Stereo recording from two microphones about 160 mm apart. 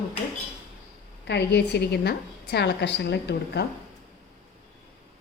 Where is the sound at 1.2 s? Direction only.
90° left.